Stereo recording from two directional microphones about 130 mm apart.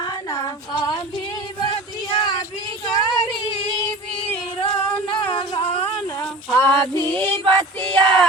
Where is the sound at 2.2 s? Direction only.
35° left (ahead or behind).